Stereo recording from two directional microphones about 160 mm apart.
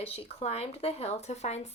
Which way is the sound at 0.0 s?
40° left (ahead or behind).